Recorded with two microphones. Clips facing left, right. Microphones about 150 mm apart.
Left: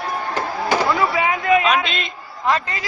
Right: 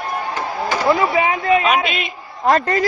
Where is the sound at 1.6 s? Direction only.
10° right (ahead or behind).